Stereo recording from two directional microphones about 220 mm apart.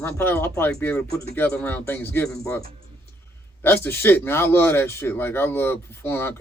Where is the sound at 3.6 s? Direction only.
10° left (ahead or behind).